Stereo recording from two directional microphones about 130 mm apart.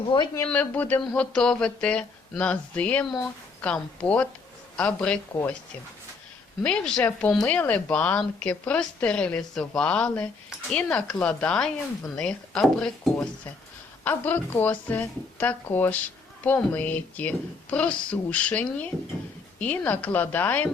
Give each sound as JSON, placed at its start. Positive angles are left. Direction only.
{"t": 0.1, "sound": "speech", "side_deg": 40}
{"t": 0.4, "sound": "a woman's voice", "side_deg": 15}
{"t": 6.6, "sound": "a woman's voice", "side_deg": 10}